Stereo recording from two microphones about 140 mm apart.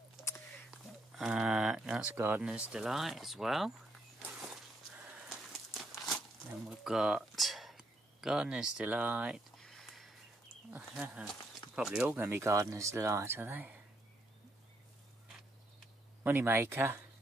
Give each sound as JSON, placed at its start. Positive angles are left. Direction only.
{"t": 0.7, "sound": "a sound", "side_deg": 0}
{"t": 2.1, "sound": "speech", "side_deg": -20}
{"t": 2.4, "sound": "speech", "side_deg": -5}
{"t": 4.4, "sound": "walk", "side_deg": 0}
{"t": 5.3, "sound": "crumpling", "side_deg": 0}
{"t": 6.6, "sound": "a sound", "side_deg": 0}
{"t": 10.8, "sound": "speech", "side_deg": -5}
{"t": 12.2, "sound": "speech", "side_deg": -20}
{"t": 16.3, "sound": "speech", "side_deg": -15}